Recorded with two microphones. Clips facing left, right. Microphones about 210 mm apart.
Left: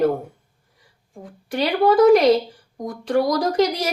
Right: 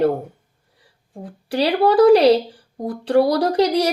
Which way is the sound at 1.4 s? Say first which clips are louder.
Right 1 dB; 35° right (ahead or behind).